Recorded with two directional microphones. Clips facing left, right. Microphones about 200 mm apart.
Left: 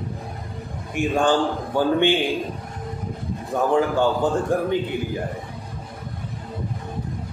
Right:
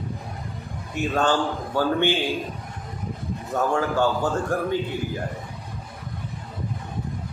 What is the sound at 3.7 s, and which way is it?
A man's voice, 20° left (ahead or behind).